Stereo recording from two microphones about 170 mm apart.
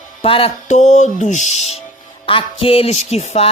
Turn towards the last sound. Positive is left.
turn(degrees=40)  # may be behind; listen again after turning